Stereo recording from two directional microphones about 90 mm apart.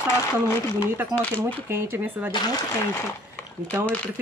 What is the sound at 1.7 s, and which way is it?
Speech, 20° right (ahead or behind).